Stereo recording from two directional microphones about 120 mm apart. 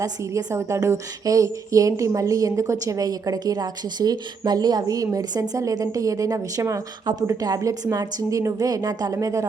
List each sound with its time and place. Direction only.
0.0 s a woman's voice: 25° right (ahead or behind)